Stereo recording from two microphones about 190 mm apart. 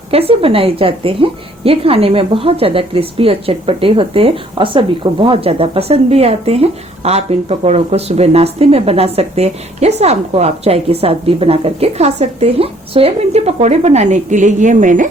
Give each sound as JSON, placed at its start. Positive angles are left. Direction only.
{"t": 0.1, "sound": "a woman's voice", "side_deg": -30}